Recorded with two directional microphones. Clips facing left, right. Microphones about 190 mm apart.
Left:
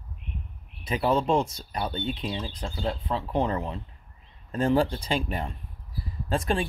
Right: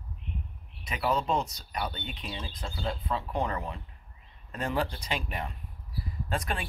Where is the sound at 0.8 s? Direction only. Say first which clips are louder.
Left 5 dB; 30° left (ahead or behind).